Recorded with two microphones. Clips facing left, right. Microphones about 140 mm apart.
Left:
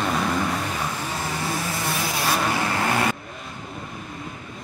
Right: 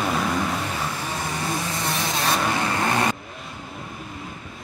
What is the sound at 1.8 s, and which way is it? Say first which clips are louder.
Vehicle: right 1 dB; 20° right (ahead or behind).